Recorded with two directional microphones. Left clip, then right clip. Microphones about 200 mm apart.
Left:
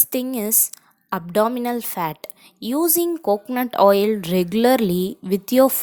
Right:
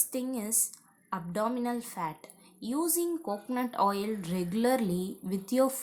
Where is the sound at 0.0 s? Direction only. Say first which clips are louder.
Left 11 dB; 40° left (ahead or behind).